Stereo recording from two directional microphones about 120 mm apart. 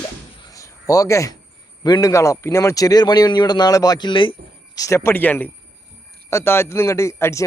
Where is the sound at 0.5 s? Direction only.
30° left (ahead or behind).